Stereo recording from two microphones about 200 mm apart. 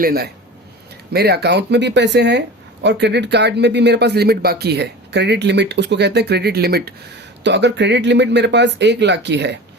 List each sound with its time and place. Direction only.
0.0 s a man's voice: 50° right (ahead or behind)